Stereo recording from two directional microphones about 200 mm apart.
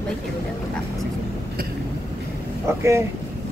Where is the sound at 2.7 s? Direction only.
15° right (ahead or behind).